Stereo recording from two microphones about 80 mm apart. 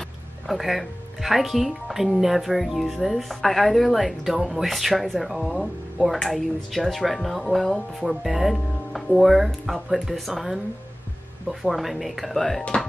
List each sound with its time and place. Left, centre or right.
0.5 s speech: centre